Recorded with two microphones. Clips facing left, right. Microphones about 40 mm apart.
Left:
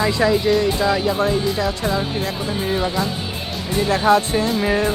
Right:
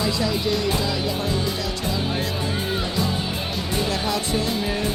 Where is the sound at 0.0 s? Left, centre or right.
Left.